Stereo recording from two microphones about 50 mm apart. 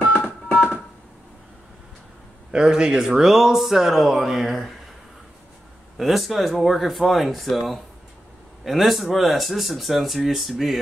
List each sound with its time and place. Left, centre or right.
0.0 s music: left
2.5 s speech: centre
5.9 s speech: centre